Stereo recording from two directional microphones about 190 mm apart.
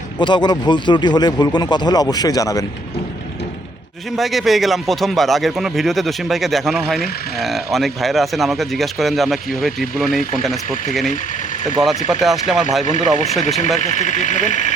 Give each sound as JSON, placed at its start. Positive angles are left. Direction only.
{"t": 0.2, "sound": "speech", "side_deg": 25}
{"t": 4.1, "sound": "speech", "side_deg": 0}
{"t": 12.0, "sound": "speech", "side_deg": 0}
{"t": 12.8, "sound": "speech", "side_deg": 40}